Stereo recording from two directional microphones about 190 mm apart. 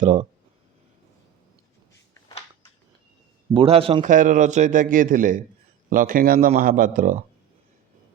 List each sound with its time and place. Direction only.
0.0 s speech: 40° right (ahead or behind)
3.5 s a man's voice: 30° right (ahead or behind)